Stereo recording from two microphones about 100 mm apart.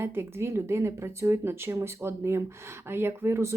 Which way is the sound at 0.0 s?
25° right (ahead or behind).